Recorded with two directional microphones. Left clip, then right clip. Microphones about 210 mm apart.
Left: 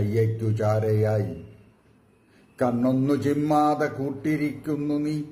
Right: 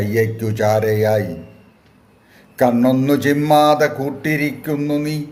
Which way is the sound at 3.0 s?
10° left (ahead or behind).